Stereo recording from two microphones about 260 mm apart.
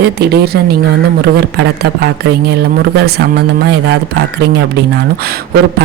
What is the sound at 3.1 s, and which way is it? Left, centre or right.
Speech, right.